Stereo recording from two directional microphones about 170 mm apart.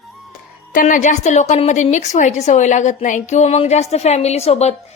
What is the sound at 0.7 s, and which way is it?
A woman's voice, 55° left (ahead or behind).